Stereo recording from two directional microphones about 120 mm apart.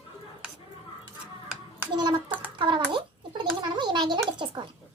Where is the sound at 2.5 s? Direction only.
45° right (ahead or behind).